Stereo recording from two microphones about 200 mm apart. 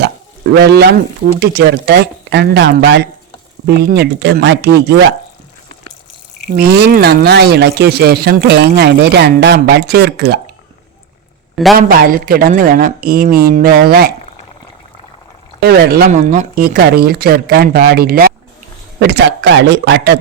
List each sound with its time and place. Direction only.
0.5 s speech: 55° right (ahead or behind)
6.6 s speech: 50° right (ahead or behind)
11.5 s speech: centre (ahead or behind)
11.8 s speech: 45° right (ahead or behind)
15.6 s a man's voice: 50° right (ahead or behind)